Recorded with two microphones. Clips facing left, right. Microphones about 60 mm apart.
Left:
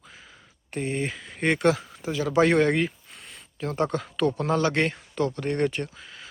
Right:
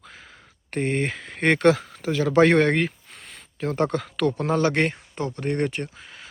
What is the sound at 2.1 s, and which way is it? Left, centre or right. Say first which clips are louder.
Speech: right 3 dB; right.